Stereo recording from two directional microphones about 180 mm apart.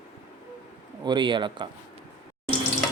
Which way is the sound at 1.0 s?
25° right (ahead or behind).